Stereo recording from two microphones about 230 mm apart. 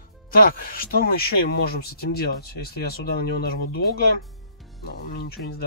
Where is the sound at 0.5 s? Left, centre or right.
Left.